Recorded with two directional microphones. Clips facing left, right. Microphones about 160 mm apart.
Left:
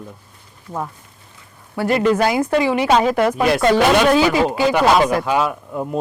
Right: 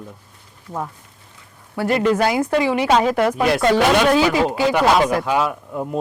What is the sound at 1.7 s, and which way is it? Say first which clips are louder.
Speech: left 1 dB; 10° left (ahead or behind).